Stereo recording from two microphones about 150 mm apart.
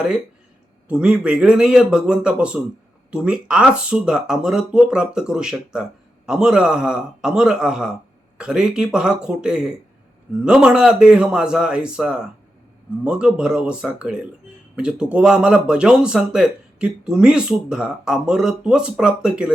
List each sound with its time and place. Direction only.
0.9 s a man's voice: 5° right (ahead or behind)